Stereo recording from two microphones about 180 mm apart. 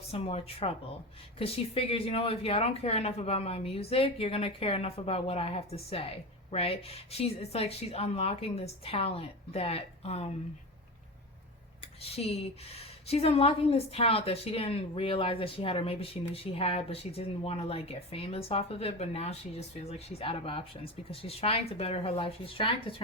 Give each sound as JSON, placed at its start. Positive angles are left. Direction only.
{"t": 0.1, "sound": "a woman's voice", "side_deg": 35}
{"t": 12.0, "sound": "a woman's voice", "side_deg": 35}